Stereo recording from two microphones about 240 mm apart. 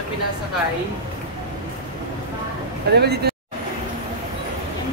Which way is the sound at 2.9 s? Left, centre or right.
Right.